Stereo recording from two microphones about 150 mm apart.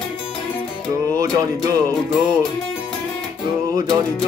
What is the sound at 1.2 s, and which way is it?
Speech, 25° right (ahead or behind).